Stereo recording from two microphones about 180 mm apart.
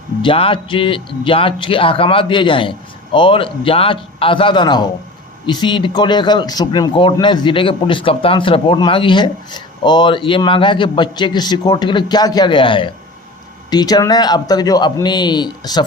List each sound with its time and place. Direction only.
0.2 s speech: 30° left (ahead or behind)